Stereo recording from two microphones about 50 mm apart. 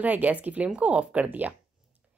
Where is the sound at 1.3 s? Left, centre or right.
Right.